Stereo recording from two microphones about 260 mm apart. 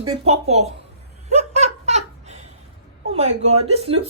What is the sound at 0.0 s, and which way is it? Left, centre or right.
Speech, right.